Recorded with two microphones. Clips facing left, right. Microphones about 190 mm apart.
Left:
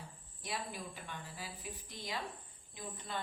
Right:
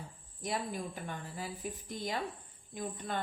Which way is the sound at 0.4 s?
50° right (ahead or behind).